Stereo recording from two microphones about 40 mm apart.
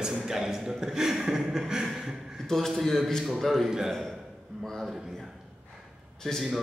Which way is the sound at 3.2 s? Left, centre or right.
Centre.